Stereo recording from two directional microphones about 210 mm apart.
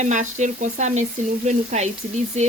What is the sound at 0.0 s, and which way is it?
Speech, 35° right (ahead or behind).